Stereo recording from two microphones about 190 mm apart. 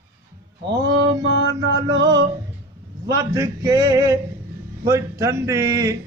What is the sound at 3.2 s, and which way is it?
Mantra, 15° right (ahead or behind).